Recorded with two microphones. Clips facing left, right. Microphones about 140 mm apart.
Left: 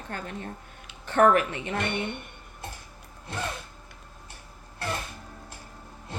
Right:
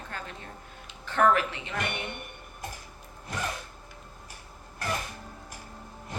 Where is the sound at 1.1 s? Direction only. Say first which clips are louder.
Left 3 dB; 45° left (ahead or behind).